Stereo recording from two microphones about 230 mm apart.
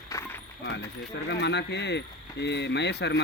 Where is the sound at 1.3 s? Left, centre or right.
Left.